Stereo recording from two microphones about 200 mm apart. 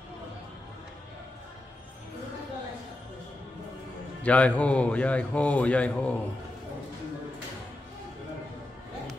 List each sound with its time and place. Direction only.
4.2 s a man's voice: 5° left (ahead or behind)